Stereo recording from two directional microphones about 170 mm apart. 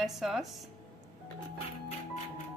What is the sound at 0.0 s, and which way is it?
Speech, centre (ahead or behind).